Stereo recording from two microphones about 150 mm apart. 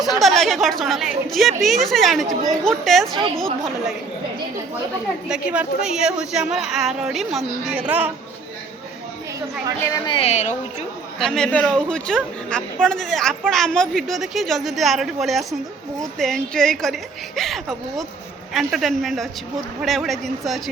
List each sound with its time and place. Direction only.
0.0 s a woman's voice: centre (ahead or behind)
5.3 s a woman's voice: 5° right (ahead or behind)
9.9 s speech: 35° left (ahead or behind)
11.2 s a woman's voice: 5° left (ahead or behind)